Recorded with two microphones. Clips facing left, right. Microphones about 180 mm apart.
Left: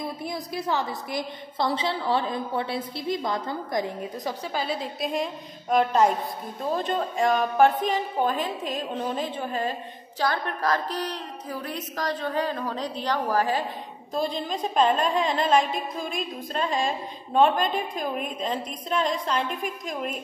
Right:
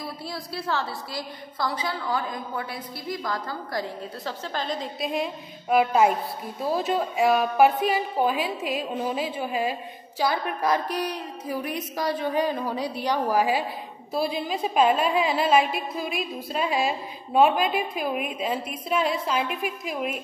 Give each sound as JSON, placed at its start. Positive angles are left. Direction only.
{"t": 0.0, "sound": "a woman's voice", "side_deg": 20}